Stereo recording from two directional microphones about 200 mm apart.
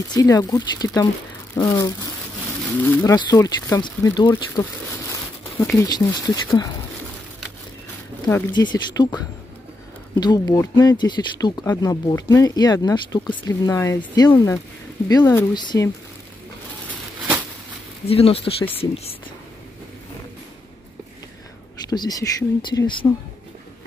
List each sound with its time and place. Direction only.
0.1 s speech: 20° left (ahead or behind)
4.9 s crumpling: 10° left (ahead or behind)
5.8 s speech: 20° left (ahead or behind)
8.3 s speech: 10° left (ahead or behind)
10.2 s speech: 20° left (ahead or behind)
18.0 s speech: 30° left (ahead or behind)
21.8 s speech: 20° left (ahead or behind)